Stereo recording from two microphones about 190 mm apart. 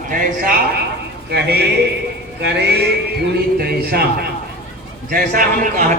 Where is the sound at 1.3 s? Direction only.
60° right (ahead or behind).